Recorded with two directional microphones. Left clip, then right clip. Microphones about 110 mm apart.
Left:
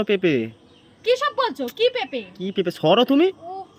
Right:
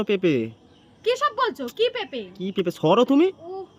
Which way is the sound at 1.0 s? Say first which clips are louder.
Left 2 dB; 35° right (ahead or behind).